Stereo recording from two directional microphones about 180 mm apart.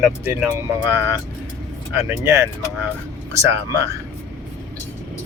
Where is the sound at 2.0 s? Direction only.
15° right (ahead or behind).